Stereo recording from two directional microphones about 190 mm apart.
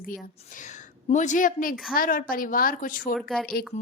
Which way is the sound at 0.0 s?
45° left (ahead or behind).